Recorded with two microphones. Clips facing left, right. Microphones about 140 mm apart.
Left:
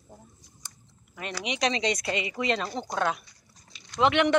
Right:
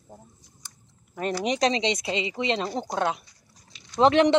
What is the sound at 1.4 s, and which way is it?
Speech, 40° right (ahead or behind).